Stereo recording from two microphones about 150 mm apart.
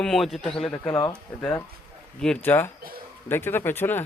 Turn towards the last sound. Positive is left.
turn(degrees=15)  # may be behind; listen again after turning